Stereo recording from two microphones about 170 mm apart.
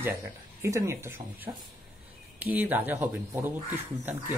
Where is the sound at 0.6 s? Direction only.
15° right (ahead or behind).